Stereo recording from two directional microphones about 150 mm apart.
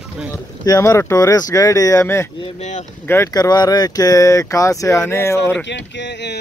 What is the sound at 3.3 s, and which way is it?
Speech, 25° left (ahead or behind).